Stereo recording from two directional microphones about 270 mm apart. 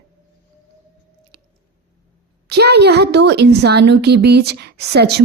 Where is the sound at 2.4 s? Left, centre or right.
Right.